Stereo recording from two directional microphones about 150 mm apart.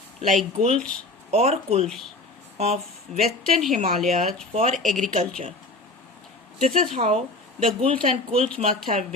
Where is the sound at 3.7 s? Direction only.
45° right (ahead or behind).